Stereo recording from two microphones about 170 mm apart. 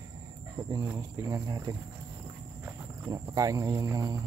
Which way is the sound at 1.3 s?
20° right (ahead or behind).